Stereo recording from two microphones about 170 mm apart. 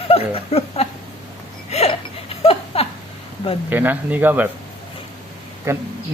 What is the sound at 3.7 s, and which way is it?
Speech, 10° right (ahead or behind).